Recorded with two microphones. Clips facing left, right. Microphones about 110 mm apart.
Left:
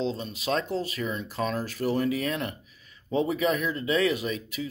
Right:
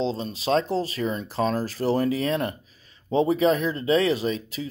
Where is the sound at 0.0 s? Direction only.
30° right (ahead or behind).